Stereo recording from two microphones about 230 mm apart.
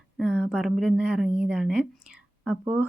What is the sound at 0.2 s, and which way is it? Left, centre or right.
A woman's voice, centre.